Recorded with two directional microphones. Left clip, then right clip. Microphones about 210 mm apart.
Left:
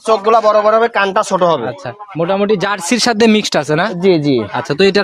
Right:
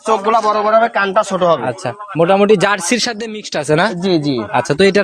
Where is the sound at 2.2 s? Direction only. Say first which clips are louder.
Right 3 dB; 20° right (ahead or behind).